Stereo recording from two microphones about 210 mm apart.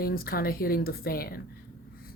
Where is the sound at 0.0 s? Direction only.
45° left (ahead or behind).